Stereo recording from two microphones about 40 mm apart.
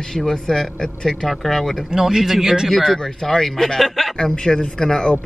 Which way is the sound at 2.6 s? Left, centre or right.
Centre.